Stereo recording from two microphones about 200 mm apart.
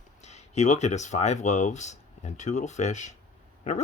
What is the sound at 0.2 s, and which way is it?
Speech, 35° left (ahead or behind).